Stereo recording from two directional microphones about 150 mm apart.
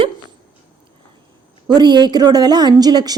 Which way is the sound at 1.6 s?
30° right (ahead or behind).